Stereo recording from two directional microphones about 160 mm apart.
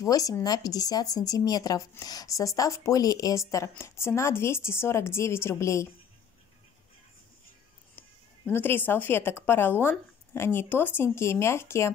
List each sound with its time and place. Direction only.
0.0 s speech: 20° left (ahead or behind)
8.5 s speech: 15° left (ahead or behind)